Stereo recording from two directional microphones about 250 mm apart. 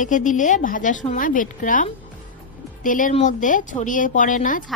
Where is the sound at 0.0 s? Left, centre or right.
Left.